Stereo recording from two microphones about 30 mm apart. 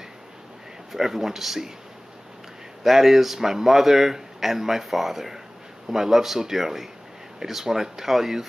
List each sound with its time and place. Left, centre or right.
0.9 s speech: centre
2.8 s speech: centre